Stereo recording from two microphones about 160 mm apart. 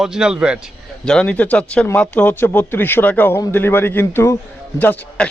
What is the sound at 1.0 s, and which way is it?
Speech, 5° left (ahead or behind).